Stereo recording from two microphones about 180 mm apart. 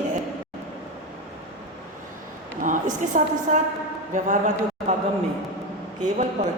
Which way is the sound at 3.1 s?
45° right (ahead or behind).